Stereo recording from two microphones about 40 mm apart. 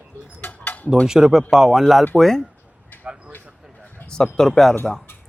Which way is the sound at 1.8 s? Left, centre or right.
Centre.